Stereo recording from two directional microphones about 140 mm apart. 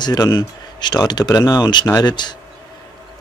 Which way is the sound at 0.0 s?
30° left (ahead or behind).